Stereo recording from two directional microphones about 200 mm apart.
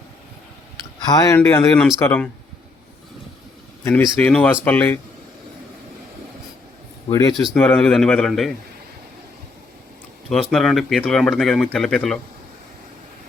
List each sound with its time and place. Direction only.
1.0 s speech: 20° left (ahead or behind)
4.2 s speech: 5° left (ahead or behind)
7.1 s speech: 15° left (ahead or behind)
7.3 s speech: 5° left (ahead or behind)
10.2 s speech: centre (ahead or behind)